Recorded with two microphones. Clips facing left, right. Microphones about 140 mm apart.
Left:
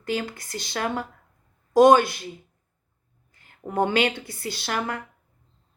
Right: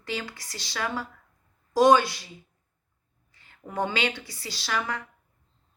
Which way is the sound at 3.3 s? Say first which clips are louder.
Left 2 dB; 50° left (ahead or behind).